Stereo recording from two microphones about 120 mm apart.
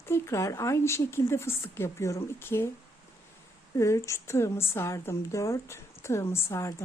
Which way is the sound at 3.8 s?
25° left (ahead or behind).